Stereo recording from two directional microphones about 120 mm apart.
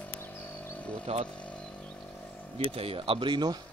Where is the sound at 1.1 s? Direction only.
55° right (ahead or behind).